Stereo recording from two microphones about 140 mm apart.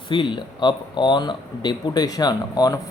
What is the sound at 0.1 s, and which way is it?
Speech, 35° left (ahead or behind).